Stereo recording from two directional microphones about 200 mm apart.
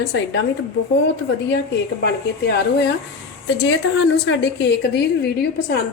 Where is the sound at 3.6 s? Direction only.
65° left (ahead or behind).